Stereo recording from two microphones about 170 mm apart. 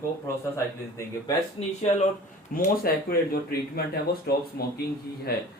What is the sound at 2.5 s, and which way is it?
Speech, 60° left (ahead or behind).